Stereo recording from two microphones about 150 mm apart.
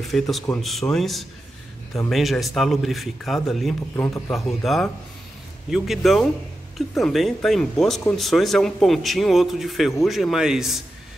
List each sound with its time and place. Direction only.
0.1 s speech: centre (ahead or behind)
3.9 s a man's voice: 15° left (ahead or behind)
4.3 s speech: centre (ahead or behind)